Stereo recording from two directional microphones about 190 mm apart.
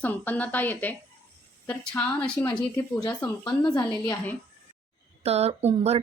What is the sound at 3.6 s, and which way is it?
Speech, 20° left (ahead or behind).